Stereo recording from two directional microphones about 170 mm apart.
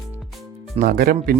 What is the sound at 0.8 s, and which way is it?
Speech, 60° right (ahead or behind).